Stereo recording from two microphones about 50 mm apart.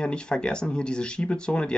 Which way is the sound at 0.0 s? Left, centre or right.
Centre.